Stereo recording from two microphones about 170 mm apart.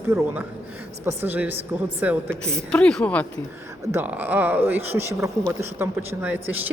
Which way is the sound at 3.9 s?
10° right (ahead or behind).